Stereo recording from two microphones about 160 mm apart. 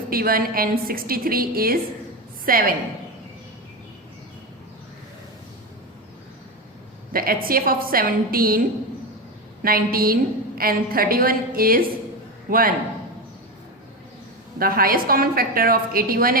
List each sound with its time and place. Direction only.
0.1 s a woman's voice: 65° right (ahead or behind)
7.1 s a woman's voice: 65° right (ahead or behind)
9.6 s a woman's voice: 65° right (ahead or behind)
14.6 s a woman's voice: 65° right (ahead or behind)